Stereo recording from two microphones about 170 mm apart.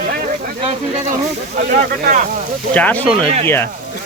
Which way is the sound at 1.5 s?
50° right (ahead or behind).